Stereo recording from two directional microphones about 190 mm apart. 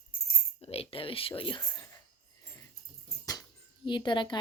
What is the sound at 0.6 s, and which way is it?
Speech, 30° left (ahead or behind).